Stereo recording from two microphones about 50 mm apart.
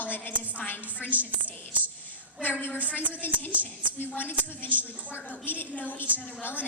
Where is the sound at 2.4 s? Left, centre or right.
Left.